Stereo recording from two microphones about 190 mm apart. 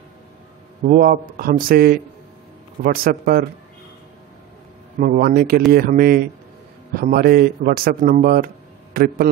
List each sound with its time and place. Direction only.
0.8 s a man's voice: 50° right (ahead or behind)
5.0 s a man's voice: 50° right (ahead or behind)